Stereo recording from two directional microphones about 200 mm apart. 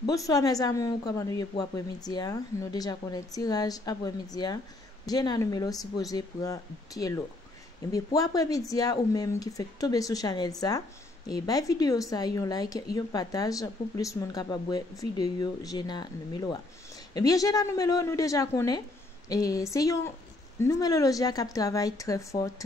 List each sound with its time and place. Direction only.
0.0 s a woman's voice: 15° left (ahead or behind)